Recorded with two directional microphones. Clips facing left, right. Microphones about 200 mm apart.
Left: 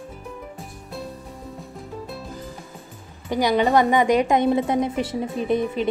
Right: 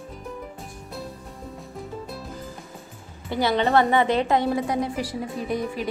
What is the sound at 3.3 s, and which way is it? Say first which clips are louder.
A woman's voice: left 2 dB; 15° left (ahead or behind).